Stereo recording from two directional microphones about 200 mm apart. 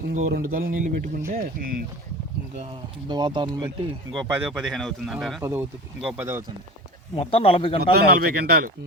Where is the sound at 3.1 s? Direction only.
20° right (ahead or behind).